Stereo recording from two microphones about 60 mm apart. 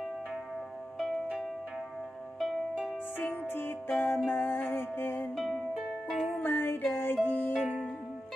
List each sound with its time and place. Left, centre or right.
3.2 s music: left
5.3 s music: centre
6.4 s music: left
7.5 s music: right